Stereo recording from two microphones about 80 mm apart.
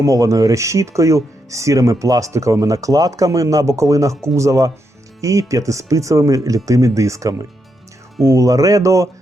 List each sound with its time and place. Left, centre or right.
0.0 s speech: right